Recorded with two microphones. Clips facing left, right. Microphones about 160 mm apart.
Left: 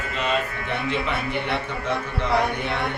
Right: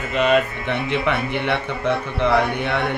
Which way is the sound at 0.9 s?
65° right (ahead or behind).